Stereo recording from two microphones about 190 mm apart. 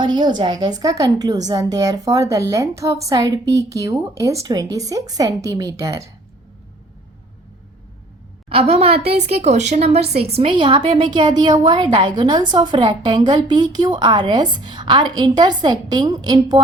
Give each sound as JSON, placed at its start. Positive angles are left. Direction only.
{"t": 0.0, "sound": "speech", "side_deg": -25}
{"t": 8.4, "sound": "speech", "side_deg": -30}